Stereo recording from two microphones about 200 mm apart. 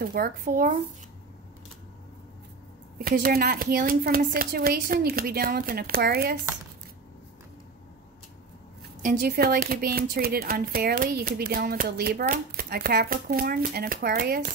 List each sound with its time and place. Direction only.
0.0 s speech: 45° right (ahead or behind)
3.0 s speech: 50° right (ahead or behind)
9.0 s speech: 50° right (ahead or behind)